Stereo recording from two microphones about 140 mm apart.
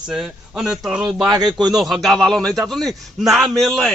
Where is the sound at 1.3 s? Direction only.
30° right (ahead or behind).